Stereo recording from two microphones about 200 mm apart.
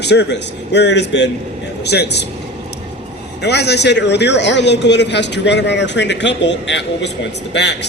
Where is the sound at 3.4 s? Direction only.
55° left (ahead or behind).